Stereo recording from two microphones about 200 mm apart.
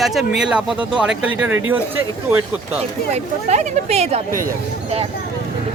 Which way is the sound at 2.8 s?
35° right (ahead or behind).